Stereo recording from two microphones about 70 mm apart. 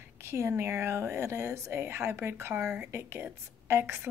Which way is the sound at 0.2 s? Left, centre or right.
Right.